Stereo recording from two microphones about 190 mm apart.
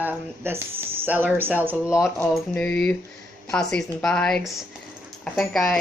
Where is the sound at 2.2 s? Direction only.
5° left (ahead or behind).